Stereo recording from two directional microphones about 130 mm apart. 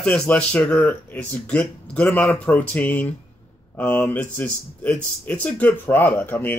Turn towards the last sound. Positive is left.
turn(degrees=15)  # may be behind; listen again after turning